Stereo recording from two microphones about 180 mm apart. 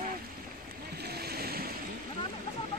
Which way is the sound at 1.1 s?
60° right (ahead or behind).